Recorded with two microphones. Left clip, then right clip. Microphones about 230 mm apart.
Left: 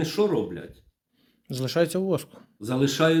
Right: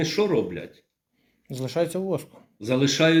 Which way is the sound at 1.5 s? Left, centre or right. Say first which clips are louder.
Left 1 dB; left.